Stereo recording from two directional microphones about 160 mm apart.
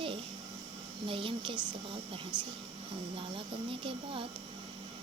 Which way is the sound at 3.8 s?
35° right (ahead or behind).